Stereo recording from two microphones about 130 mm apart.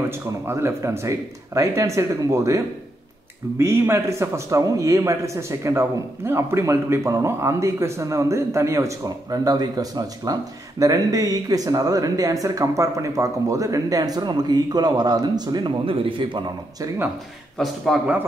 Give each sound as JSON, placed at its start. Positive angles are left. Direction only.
{"t": 0.5, "sound": "a man's voice", "side_deg": -20}
{"t": 17.9, "sound": "a man's voice", "side_deg": 0}